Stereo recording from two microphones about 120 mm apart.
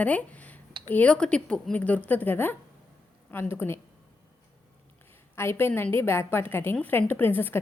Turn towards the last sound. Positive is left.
turn(degrees=15)  # may be behind; listen again after turning